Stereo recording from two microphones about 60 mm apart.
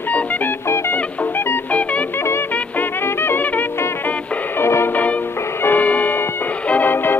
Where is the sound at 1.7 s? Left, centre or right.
Left.